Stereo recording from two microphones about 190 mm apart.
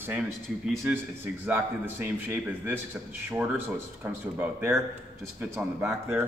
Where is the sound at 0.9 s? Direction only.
10° right (ahead or behind).